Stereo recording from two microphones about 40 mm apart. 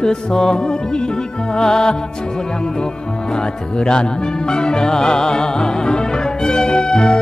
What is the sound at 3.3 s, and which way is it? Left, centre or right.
Music, left.